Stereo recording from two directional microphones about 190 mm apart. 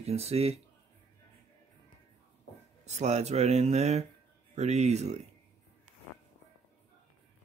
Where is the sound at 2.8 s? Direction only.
35° right (ahead or behind).